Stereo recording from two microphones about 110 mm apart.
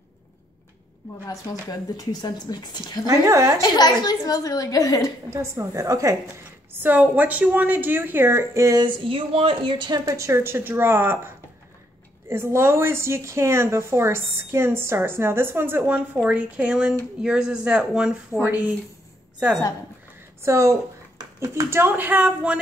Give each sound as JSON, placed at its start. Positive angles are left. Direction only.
{"t": 1.5, "sound": "speech", "side_deg": 35}
{"t": 3.1, "sound": "speech", "side_deg": -30}
{"t": 3.6, "sound": "speech", "side_deg": 40}
{"t": 5.3, "sound": "speech", "side_deg": -25}
{"t": 8.8, "sound": "speech", "side_deg": -55}
{"t": 20.4, "sound": "speech", "side_deg": -25}